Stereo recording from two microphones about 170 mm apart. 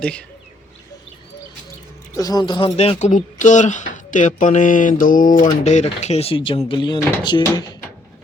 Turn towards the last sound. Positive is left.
turn(degrees=25)  # may be behind; listen again after turning